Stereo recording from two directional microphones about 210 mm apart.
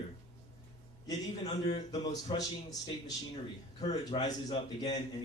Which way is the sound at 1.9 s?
20° left (ahead or behind).